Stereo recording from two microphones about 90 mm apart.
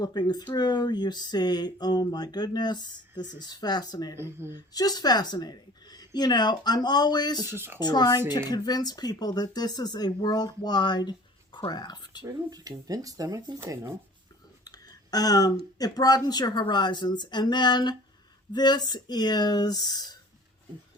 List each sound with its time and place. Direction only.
0.0 s speech: 50° left (ahead or behind)
4.2 s speech: 25° right (ahead or behind)
4.7 s speech: 45° left (ahead or behind)
7.5 s speech: 25° right (ahead or behind)
7.8 s speech: 50° left (ahead or behind)
12.2 s speech: 45° right (ahead or behind)
14.6 s a sound: 45° left (ahead or behind)
15.8 s speech: 45° left (ahead or behind)